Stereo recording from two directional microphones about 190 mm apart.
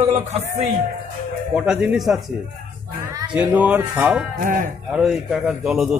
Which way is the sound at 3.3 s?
5° right (ahead or behind).